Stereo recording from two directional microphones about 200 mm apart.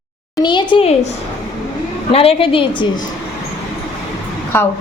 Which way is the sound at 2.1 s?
30° left (ahead or behind).